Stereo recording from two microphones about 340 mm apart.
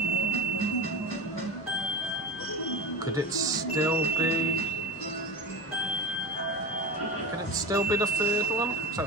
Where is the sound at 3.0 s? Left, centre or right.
Centre.